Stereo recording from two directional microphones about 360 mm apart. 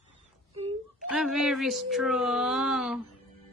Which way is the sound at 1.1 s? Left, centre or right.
Centre.